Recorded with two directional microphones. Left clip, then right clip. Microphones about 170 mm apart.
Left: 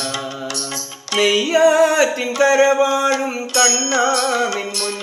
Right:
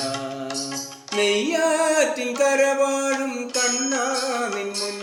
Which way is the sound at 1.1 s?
25° left (ahead or behind).